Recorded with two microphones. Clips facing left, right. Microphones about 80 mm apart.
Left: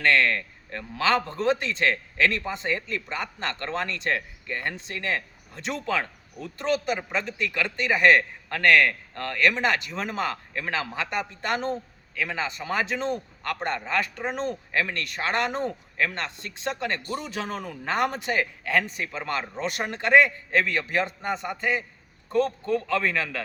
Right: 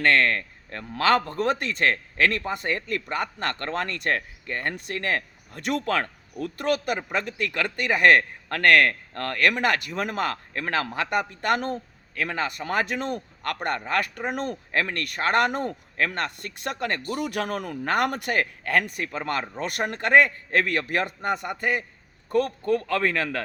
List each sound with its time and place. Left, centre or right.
0.0 s speech: right